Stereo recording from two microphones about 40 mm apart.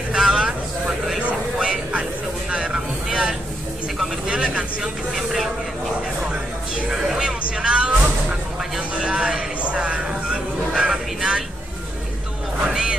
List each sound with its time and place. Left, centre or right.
0.1 s vehicle: centre
5.1 s vehicle: centre
6.9 s music: centre; by 10.0 s right
10.7 s a sound: right
12.6 s music: centre